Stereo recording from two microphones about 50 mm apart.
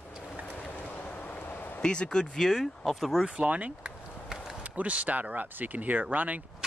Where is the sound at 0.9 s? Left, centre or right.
Left.